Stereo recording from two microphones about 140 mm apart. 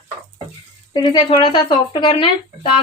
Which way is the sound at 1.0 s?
35° left (ahead or behind).